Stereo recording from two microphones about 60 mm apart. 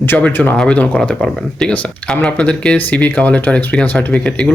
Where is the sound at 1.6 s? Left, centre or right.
Left.